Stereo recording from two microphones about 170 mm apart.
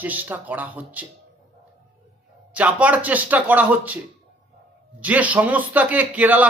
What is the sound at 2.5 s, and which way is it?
A man's voice, 10° right (ahead or behind).